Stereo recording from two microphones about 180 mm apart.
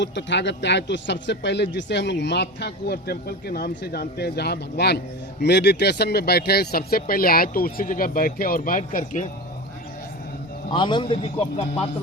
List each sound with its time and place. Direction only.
0.0 s speech: 80° left; by 9.2 s 50° left (ahead or behind)
10.7 s a man's voice: 25° left (ahead or behind)